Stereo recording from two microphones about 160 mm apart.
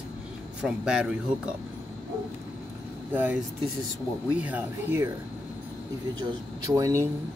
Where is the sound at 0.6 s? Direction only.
5° right (ahead or behind).